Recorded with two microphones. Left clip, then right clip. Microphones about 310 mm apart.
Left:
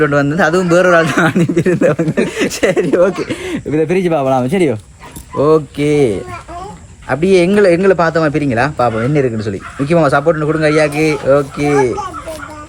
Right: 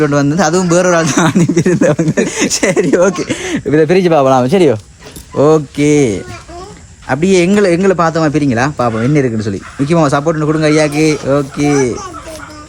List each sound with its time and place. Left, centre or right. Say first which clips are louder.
0.0 s a man's voice: even; centre